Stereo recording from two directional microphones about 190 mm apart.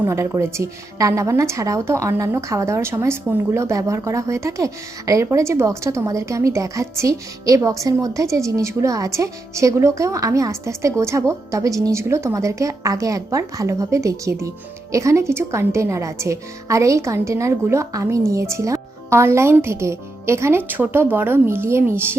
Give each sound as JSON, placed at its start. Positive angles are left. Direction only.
{"t": 0.0, "sound": "a woman's voice", "side_deg": -15}